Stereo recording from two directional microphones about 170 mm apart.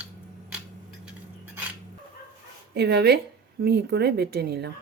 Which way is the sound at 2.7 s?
80° right.